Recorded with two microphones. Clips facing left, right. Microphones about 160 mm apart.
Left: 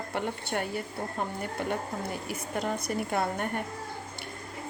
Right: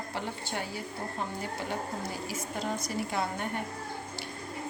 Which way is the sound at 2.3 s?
55° left (ahead or behind).